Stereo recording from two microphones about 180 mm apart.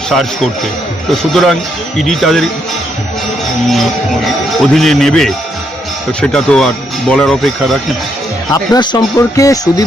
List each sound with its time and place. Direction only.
1.2 s a man's voice: centre (ahead or behind)
4.6 s a man's voice: centre (ahead or behind)
8.4 s speech: 20° left (ahead or behind)